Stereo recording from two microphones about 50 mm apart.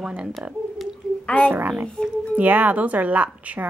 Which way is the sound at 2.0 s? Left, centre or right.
Centre.